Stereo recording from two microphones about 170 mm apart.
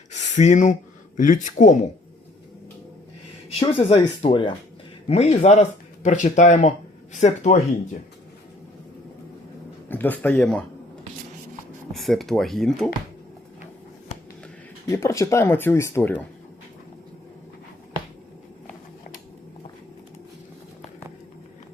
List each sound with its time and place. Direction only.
0.1 s speech: 45° left (ahead or behind)
3.6 s speech: 30° left (ahead or behind)
9.9 s speech: 10° left (ahead or behind)
11.9 s speech: centre (ahead or behind)
14.8 s speech: 20° left (ahead or behind)